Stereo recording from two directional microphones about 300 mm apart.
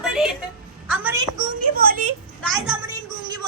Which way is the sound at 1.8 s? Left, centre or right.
Right.